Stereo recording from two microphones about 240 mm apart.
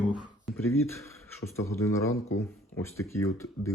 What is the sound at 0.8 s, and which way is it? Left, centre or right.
Speech, centre.